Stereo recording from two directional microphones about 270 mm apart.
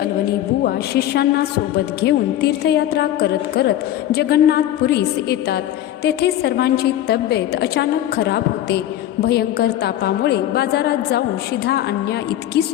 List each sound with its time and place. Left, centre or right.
0.6 s a woman's voice: left